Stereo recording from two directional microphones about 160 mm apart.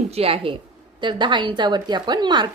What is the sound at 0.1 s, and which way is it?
A woman's voice, 40° right (ahead or behind).